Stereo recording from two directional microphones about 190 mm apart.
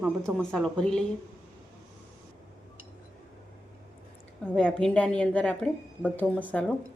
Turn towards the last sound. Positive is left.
turn(degrees=5)  # may be behind; listen again after turning